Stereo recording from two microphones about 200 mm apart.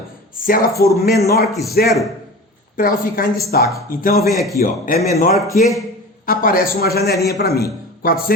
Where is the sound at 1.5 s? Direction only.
Centre (ahead or behind).